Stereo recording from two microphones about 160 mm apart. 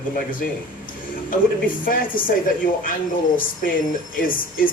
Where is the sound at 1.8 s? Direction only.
60° left (ahead or behind).